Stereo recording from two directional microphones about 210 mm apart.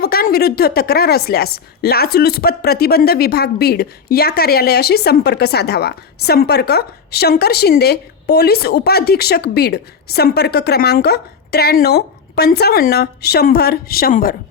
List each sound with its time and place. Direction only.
0.0 s a woman's voice: 45° left (ahead or behind)